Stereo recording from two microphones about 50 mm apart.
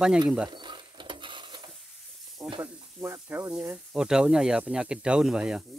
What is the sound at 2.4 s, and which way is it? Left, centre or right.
Sizzle, right.